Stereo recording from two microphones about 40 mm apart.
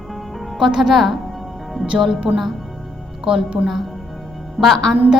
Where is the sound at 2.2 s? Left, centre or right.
Centre.